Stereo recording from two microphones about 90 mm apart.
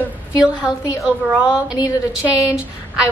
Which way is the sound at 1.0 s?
10° right (ahead or behind).